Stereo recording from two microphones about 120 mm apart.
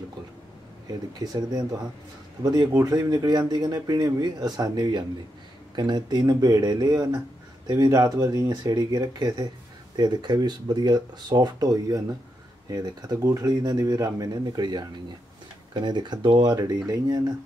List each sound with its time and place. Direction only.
1.2 s speech: 30° right (ahead or behind)